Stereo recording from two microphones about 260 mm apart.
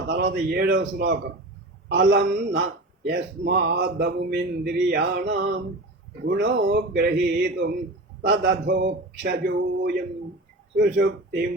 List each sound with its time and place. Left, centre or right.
0.1 s a man's voice: right